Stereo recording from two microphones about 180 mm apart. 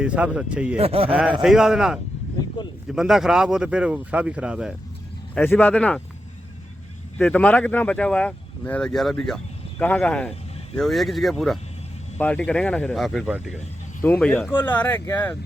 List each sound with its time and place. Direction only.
0.0 s speech: 5° right (ahead or behind)
0.8 s speech: 30° right (ahead or behind)
1.4 s speech: centre (ahead or behind)
5.3 s speech: 10° left (ahead or behind)
7.2 s speech: 10° left (ahead or behind)
14.0 s speech: 10° left (ahead or behind)